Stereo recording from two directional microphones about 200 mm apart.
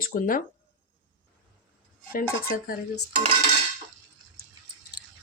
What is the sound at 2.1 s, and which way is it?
Speech, 45° left (ahead or behind).